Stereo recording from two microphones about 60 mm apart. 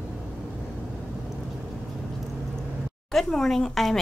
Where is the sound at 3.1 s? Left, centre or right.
Centre.